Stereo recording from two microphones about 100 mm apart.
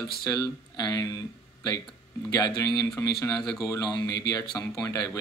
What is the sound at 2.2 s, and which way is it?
Speech, 40° left (ahead or behind).